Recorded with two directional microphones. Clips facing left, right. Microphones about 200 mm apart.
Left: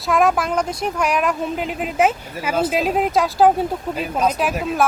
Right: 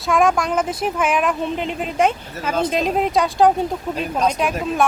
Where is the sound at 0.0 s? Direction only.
Centre (ahead or behind).